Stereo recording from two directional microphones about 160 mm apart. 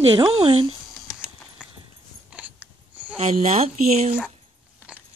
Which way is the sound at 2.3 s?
10° right (ahead or behind).